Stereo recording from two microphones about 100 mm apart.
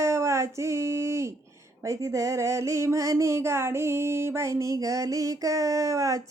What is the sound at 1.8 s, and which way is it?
Speech, 30° right (ahead or behind).